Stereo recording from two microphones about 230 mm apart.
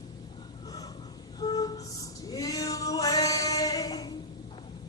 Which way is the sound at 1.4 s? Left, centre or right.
Centre.